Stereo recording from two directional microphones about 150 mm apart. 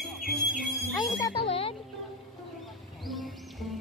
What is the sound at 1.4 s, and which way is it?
Music, 40° left (ahead or behind).